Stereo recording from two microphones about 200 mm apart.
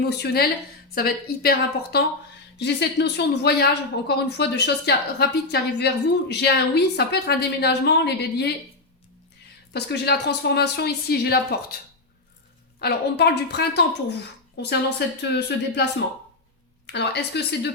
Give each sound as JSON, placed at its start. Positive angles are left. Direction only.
{"t": 0.0, "sound": "a woman's voice", "side_deg": 55}
{"t": 9.7, "sound": "speech", "side_deg": 55}
{"t": 12.8, "sound": "speech", "side_deg": 55}